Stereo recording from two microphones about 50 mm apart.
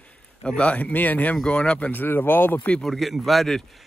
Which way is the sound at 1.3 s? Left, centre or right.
Left.